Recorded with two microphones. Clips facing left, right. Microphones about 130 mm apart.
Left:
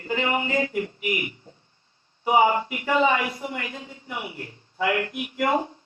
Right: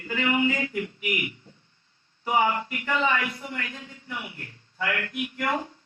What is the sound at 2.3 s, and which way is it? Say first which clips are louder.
A man's voice: left 5 dB; 20° left (ahead or behind).